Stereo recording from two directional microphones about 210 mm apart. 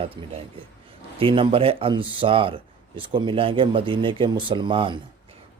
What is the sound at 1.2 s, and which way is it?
Speech, 25° right (ahead or behind).